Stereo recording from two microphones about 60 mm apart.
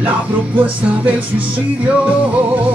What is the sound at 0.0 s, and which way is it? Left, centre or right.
Music, right.